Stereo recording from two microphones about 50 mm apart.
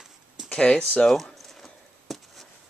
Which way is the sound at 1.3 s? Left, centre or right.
Centre.